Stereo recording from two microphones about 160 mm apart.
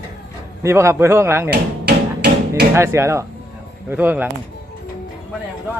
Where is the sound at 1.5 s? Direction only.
90° right.